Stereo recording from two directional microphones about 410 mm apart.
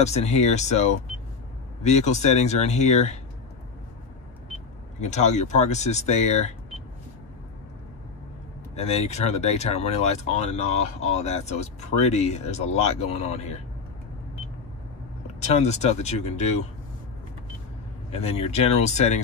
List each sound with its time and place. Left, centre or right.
0.0 s speech: centre
5.0 s speech: centre
8.7 s speech: centre
15.4 s speech: centre
18.1 s speech: centre